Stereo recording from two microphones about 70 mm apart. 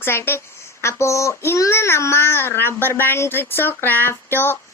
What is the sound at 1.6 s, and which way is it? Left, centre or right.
A child's voice, left.